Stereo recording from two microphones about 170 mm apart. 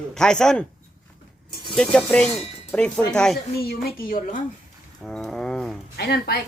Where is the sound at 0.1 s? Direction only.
5° left (ahead or behind).